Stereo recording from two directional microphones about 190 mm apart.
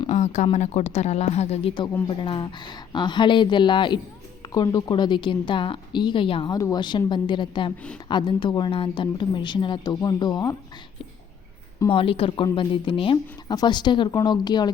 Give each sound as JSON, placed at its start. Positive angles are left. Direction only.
{"t": 0.1, "sound": "speech", "side_deg": 35}
{"t": 11.9, "sound": "speech", "side_deg": 30}